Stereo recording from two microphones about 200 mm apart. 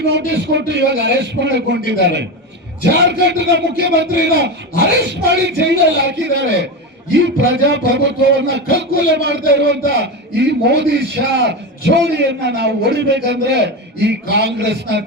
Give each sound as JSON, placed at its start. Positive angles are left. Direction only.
{"t": 0.0, "sound": "a man's voice", "side_deg": -60}